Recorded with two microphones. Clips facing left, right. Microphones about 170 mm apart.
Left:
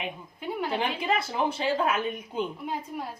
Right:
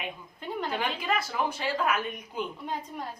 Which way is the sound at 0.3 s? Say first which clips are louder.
Left 2 dB; 10° left (ahead or behind).